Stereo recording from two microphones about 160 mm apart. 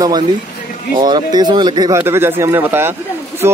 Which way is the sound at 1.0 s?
25° right (ahead or behind).